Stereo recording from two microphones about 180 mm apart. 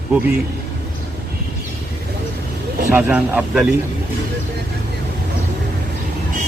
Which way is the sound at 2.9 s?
10° right (ahead or behind).